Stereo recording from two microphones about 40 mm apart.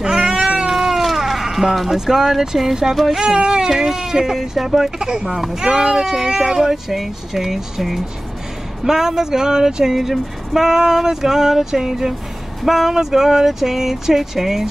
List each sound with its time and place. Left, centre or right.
0.0 s cat: centre
0.7 s cat: centre
3.1 s speech: centre
4.9 s speech: centre
5.7 s speech: right
9.9 s speech: centre